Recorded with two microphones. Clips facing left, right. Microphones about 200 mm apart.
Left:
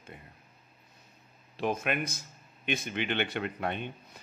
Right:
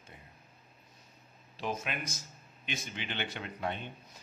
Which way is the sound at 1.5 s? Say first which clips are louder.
Left 6 dB; 55° left (ahead or behind).